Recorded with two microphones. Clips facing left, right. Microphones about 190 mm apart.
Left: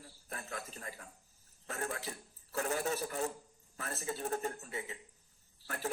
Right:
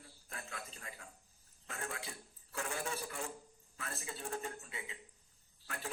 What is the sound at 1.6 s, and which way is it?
Cough, 40° left (ahead or behind).